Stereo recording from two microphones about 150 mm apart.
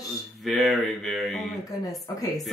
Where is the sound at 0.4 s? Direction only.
Centre (ahead or behind).